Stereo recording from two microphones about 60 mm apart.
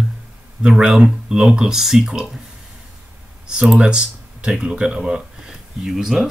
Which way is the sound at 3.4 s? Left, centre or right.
Centre.